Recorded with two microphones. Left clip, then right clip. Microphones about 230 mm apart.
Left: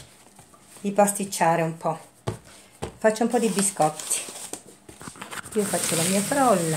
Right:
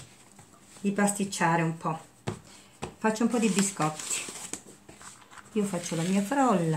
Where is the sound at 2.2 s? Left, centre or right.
Centre.